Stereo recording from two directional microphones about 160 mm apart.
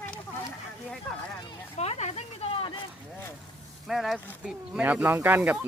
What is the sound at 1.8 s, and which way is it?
Speech, 45° left (ahead or behind).